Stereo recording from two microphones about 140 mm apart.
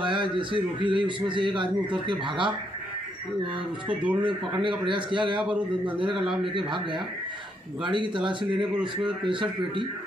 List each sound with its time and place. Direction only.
0.0 s a man's voice: 35° right (ahead or behind)
4.0 s a man's voice: 10° right (ahead or behind)
4.3 s a man's voice: 35° right (ahead or behind)
5.4 s a man's voice: 5° right (ahead or behind)
6.4 s a man's voice: 35° right (ahead or behind)